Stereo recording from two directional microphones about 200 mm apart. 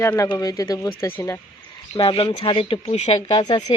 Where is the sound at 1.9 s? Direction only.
25° left (ahead or behind).